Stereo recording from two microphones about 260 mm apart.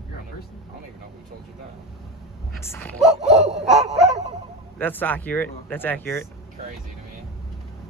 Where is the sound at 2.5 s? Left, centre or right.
Centre.